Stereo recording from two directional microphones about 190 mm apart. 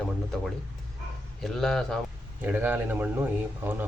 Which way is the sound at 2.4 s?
10° right (ahead or behind).